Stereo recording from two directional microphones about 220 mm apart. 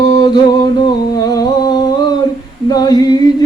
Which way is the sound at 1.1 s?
15° left (ahead or behind).